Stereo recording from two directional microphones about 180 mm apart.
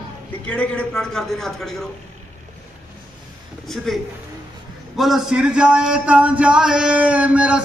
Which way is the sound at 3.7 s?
Centre (ahead or behind).